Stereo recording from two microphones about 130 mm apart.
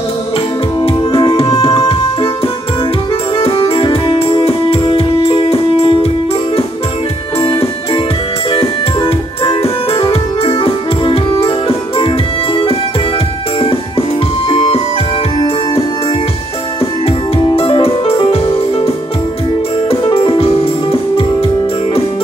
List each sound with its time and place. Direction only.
0.7 s music: 40° left (ahead or behind)
8.5 s music: 45° left (ahead or behind)
17.6 s music: 45° left (ahead or behind)
19.9 s music: 45° left (ahead or behind)